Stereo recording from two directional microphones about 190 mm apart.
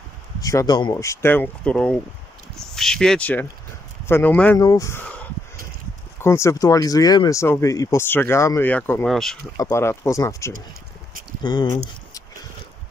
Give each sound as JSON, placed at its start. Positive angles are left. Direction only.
{"t": 0.4, "sound": "speech", "side_deg": 20}
{"t": 6.2, "sound": "speech", "side_deg": 15}
{"t": 9.6, "sound": "speech", "side_deg": 15}